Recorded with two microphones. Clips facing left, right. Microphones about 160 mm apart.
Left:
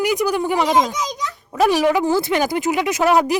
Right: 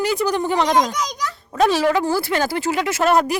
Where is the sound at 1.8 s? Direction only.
15° left (ahead or behind).